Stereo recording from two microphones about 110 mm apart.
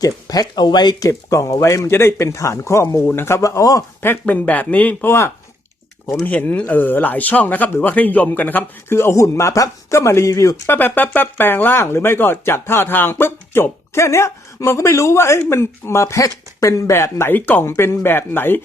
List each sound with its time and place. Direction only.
0.0 s speech: 35° left (ahead or behind)
4.0 s speech: 15° left (ahead or behind)
6.2 s speech: 15° left (ahead or behind)
10.7 s speech: 15° left (ahead or behind)